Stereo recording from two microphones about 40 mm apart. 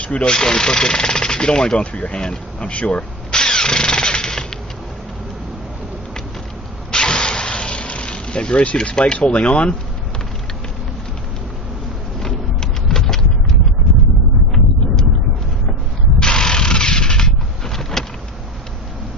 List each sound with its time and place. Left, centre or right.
0.0 s speech: left
0.3 s speech: centre
1.9 s drill: left
6.9 s vehicle: centre
8.7 s speech: left
12.2 s a sound: centre
16.2 s mechanisms: centre
17.9 s vehicle: centre